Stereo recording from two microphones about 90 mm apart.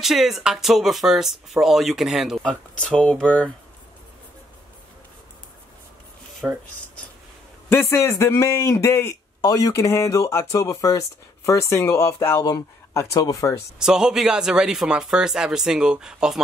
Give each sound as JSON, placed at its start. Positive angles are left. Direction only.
{"t": 0.0, "sound": "speech", "side_deg": 0}
{"t": 2.4, "sound": "speech", "side_deg": 10}
{"t": 6.4, "sound": "a man's voice", "side_deg": -15}
{"t": 7.7, "sound": "speech", "side_deg": 30}
{"t": 12.4, "sound": "speech", "side_deg": 50}
{"t": 12.9, "sound": "speech", "side_deg": 35}
{"t": 13.7, "sound": "a man's voice", "side_deg": -5}